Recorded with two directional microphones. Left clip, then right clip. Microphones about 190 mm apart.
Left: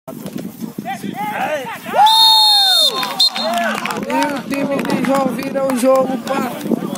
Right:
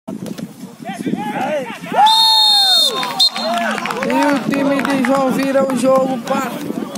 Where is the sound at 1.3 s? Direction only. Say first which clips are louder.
Even; 30° left (ahead or behind).